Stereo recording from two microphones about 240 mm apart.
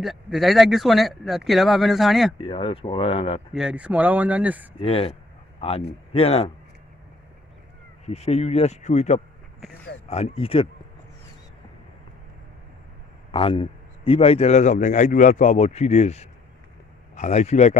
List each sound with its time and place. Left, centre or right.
0.0 s speech: centre
2.3 s a man's voice: left
3.5 s speech: centre
4.7 s a man's voice: left
8.0 s a man's voice: left
13.3 s a man's voice: left